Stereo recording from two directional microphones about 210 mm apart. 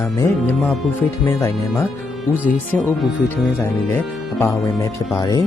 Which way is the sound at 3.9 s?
10° left (ahead or behind).